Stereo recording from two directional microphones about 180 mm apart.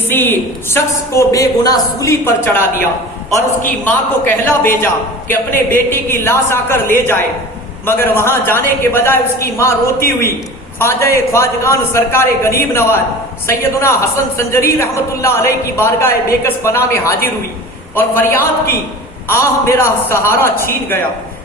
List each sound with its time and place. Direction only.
0.1 s a woman's voice: 10° left (ahead or behind)
3.8 s a woman's voice: 10° left (ahead or behind)